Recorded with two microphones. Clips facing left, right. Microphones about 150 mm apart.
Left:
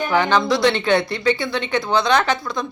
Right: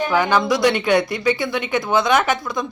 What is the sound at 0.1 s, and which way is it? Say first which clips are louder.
Speech: left 2 dB; 10° right (ahead or behind).